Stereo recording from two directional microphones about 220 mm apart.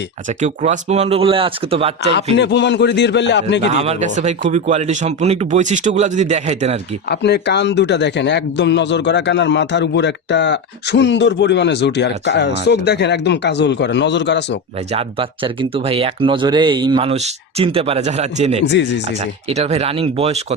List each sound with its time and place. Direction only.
0.4 s speech: 30° right (ahead or behind)
2.3 s speech: 50° left (ahead or behind)
3.6 s speech: 30° right (ahead or behind)
7.1 s speech: 50° left (ahead or behind)
15.7 s speech: 25° right (ahead or behind)
18.6 s speech: 55° left (ahead or behind)
19.2 s speech: 30° right (ahead or behind)